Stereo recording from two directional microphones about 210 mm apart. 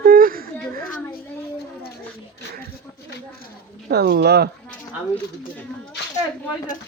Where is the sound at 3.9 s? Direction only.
50° right (ahead or behind).